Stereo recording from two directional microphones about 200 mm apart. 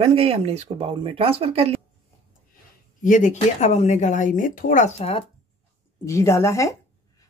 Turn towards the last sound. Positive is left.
turn(degrees=15)  # may be behind; listen again after turning